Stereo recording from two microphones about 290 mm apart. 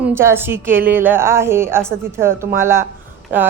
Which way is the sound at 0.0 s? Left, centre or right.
Centre.